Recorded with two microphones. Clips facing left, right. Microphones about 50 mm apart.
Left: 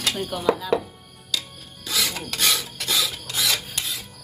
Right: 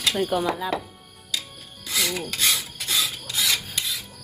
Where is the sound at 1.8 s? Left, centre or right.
Left.